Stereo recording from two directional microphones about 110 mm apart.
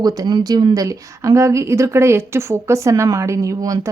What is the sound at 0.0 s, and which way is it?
Speech, 35° right (ahead or behind).